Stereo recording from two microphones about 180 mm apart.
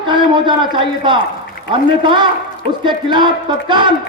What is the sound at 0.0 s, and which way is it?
A man's voice, 25° right (ahead or behind).